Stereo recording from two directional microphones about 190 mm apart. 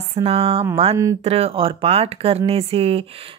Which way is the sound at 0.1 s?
30° right (ahead or behind).